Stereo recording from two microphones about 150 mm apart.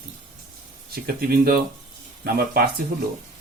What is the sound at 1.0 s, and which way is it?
Speech, 90° right.